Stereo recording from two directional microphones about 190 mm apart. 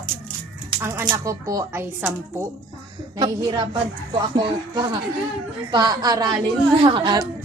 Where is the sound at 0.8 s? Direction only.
10° right (ahead or behind).